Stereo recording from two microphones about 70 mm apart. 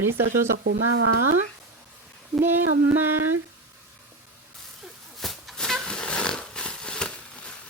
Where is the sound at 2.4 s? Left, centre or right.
Right.